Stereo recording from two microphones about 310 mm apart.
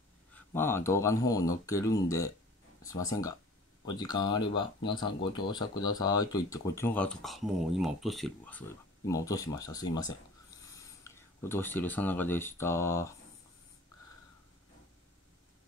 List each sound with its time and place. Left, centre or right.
0.3 s speech: centre